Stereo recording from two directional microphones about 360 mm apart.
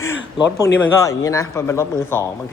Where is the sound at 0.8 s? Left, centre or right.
Centre.